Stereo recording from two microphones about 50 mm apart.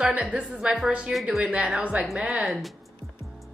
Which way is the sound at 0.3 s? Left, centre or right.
Right.